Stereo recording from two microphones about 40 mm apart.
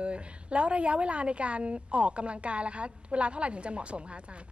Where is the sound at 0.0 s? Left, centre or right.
Right.